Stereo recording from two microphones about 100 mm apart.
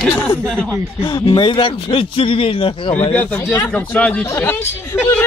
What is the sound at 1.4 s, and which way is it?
A man's voice, 60° left (ahead or behind).